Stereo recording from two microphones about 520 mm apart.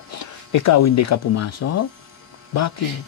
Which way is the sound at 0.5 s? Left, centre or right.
Left.